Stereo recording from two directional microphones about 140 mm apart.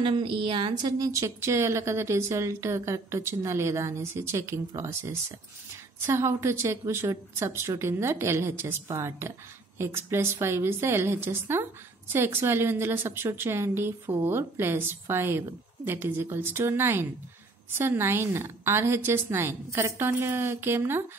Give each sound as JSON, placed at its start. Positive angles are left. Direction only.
{"t": 0.0, "sound": "a woman's voice", "side_deg": -40}